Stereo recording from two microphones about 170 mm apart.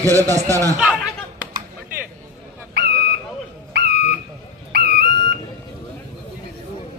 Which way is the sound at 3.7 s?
70° right (ahead or behind).